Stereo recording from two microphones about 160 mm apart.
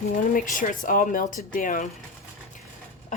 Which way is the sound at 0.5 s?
60° left (ahead or behind).